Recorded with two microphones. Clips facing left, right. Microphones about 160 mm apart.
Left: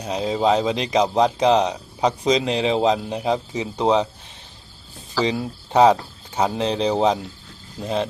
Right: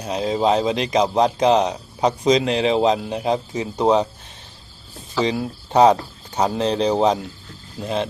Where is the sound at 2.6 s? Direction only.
35° right (ahead or behind).